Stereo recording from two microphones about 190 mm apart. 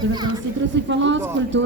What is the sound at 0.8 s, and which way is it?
Speech, 75° right (ahead or behind).